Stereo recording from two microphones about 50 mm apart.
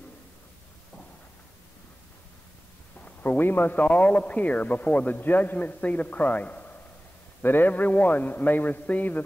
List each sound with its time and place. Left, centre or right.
3.2 s a man's voice: left